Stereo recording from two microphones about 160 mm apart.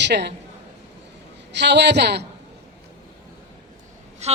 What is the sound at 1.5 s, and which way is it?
Speech, 90° right.